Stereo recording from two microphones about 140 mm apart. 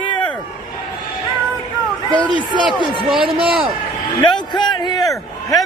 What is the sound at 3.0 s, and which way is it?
Speech, 35° right (ahead or behind).